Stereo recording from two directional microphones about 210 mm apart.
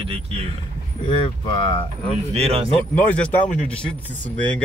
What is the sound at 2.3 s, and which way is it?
Speech, 30° right (ahead or behind).